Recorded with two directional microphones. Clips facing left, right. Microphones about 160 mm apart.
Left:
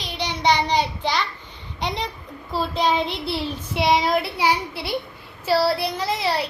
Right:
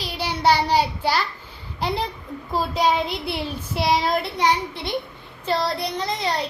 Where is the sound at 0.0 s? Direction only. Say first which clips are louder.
Right 1 dB; 5° right (ahead or behind).